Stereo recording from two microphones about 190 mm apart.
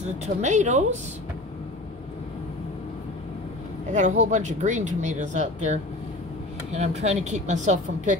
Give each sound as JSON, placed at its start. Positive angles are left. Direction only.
{"t": 0.0, "sound": "speech", "side_deg": -40}
{"t": 3.9, "sound": "speech", "side_deg": -40}